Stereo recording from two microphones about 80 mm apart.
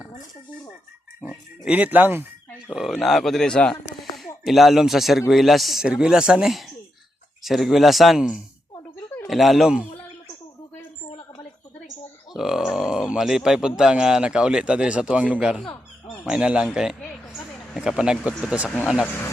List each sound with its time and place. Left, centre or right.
1.7 s speech: right
2.6 s speech: centre
12.3 s speech: centre
19.0 s speech: left